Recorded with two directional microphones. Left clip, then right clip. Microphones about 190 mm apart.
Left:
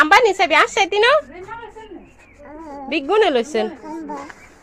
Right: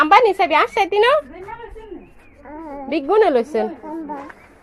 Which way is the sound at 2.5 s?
30° right (ahead or behind).